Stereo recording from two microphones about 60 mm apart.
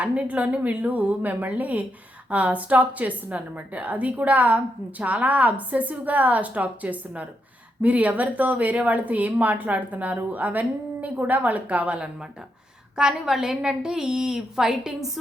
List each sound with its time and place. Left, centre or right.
0.0 s a woman's voice: right; by 15.2 s centre